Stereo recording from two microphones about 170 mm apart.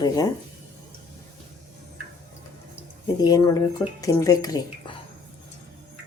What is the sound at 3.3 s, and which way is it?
Speech, 20° left (ahead or behind).